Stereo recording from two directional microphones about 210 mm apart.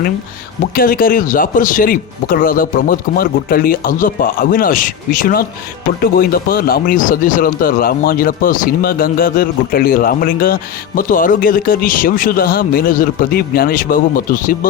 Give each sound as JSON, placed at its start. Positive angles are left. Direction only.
{"t": 0.7, "sound": "speech", "side_deg": 45}